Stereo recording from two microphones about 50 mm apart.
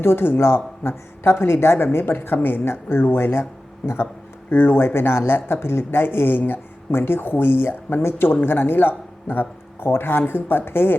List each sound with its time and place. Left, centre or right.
0.0 s speech: left